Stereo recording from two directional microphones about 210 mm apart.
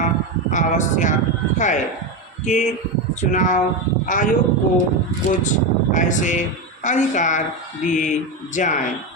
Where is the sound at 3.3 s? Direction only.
35° left (ahead or behind).